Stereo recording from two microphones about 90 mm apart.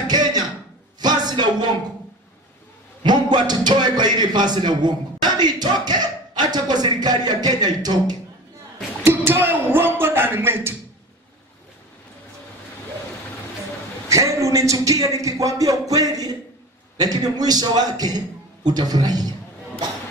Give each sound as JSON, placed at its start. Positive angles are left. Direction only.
{"t": 0.1, "sound": "a sound", "side_deg": -50}
{"t": 3.0, "sound": "a man's voice", "side_deg": -55}
{"t": 9.0, "sound": "speech", "side_deg": -25}
{"t": 14.0, "sound": "a man's voice", "side_deg": -35}